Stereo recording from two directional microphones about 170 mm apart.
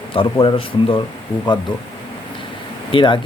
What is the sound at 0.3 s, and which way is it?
Speech, 30° left (ahead or behind).